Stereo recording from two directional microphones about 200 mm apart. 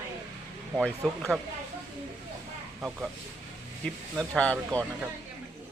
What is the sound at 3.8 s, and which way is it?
Speech, 5° left (ahead or behind).